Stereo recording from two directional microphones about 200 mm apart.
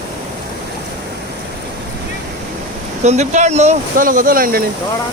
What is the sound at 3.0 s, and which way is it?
Speech, 35° right (ahead or behind).